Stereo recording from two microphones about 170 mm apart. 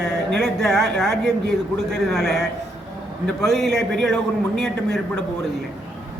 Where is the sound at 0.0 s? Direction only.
80° right.